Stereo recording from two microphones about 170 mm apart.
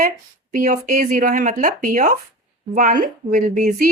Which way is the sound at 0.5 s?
45° right (ahead or behind).